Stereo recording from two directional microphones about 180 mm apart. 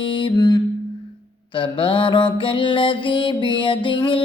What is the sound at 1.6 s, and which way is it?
Mantra, 30° left (ahead or behind).